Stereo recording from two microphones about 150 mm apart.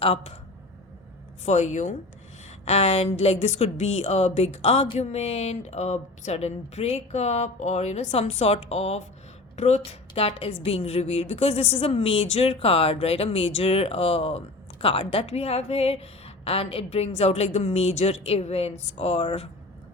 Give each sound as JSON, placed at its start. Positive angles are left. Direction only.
{"t": 0.0, "sound": "a woman's voice", "side_deg": 40}
{"t": 1.5, "sound": "a woman's voice", "side_deg": 50}